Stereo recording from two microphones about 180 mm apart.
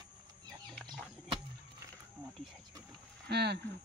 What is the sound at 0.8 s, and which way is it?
Chicken, centre (ahead or behind).